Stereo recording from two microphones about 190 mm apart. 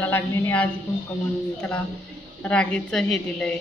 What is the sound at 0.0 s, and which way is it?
Speech, 10° left (ahead or behind).